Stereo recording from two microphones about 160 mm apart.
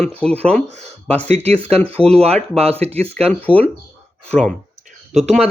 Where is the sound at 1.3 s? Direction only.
40° right (ahead or behind).